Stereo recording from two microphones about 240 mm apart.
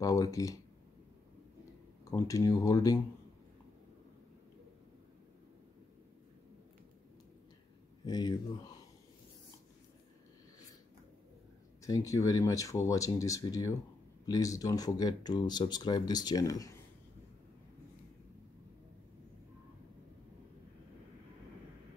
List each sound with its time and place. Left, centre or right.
0.0 s speech: centre
2.0 s speech: centre
8.0 s speech: centre
11.8 s speech: centre